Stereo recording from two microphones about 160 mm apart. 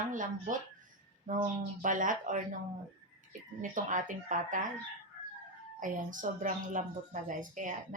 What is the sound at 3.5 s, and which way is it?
Speech, 55° right (ahead or behind).